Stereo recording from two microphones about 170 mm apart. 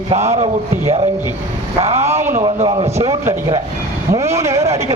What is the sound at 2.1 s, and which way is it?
Speech, 15° right (ahead or behind).